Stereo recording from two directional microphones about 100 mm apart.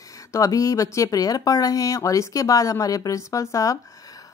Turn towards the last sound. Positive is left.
turn(degrees=30)  # may be behind; listen again after turning